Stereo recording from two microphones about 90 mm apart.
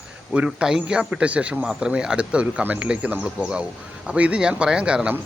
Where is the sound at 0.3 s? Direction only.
10° right (ahead or behind).